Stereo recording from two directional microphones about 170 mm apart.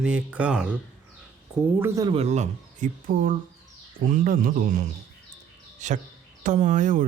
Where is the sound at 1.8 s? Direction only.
20° right (ahead or behind).